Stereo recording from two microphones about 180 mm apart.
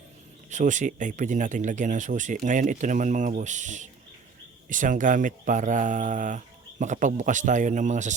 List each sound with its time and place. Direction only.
0.5 s speech: 45° right (ahead or behind)